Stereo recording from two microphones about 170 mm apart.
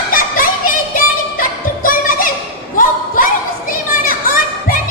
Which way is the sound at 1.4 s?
55° left (ahead or behind).